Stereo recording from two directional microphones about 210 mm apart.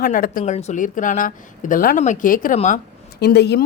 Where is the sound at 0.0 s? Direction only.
40° left (ahead or behind).